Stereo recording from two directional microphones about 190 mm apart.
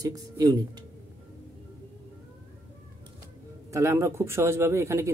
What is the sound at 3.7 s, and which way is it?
Speech, 15° right (ahead or behind).